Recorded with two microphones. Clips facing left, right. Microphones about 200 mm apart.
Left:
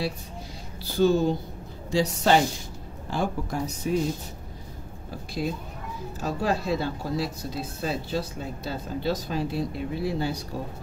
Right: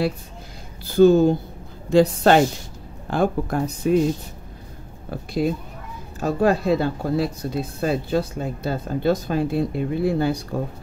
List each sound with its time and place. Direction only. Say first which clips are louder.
0.9 s speech: right 8 dB; 50° right (ahead or behind)
5.1 s speech: right 7 dB; 55° right (ahead or behind)